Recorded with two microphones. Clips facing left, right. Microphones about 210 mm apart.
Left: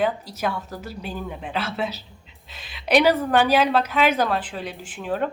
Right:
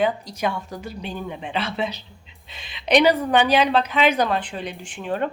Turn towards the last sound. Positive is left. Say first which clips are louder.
# even
turn(degrees=0)  # may be behind; listen again after turning